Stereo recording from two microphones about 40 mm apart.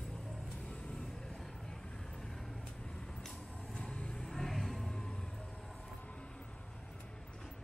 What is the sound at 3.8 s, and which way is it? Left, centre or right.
Vehicle, left.